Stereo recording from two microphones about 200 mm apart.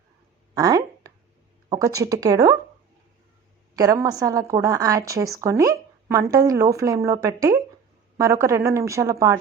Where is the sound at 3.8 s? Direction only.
20° right (ahead or behind).